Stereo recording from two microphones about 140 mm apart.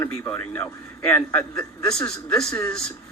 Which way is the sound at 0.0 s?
15° left (ahead or behind).